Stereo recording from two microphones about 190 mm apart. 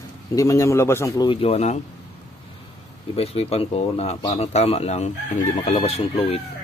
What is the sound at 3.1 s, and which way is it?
Speech, 30° left (ahead or behind).